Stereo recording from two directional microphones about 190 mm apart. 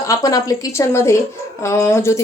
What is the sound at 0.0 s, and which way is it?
Speech, 15° left (ahead or behind).